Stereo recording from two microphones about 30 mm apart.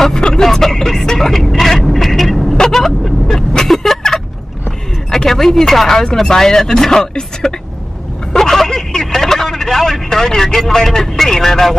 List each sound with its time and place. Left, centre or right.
0.2 s vehicle: centre
2.5 s vehicle: centre
5.1 s a sound: centre
6.2 s speech: centre
8.3 s vehicle: centre
10.0 s speech: centre